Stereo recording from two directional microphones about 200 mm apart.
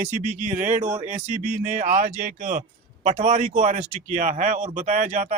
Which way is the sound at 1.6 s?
40° right (ahead or behind).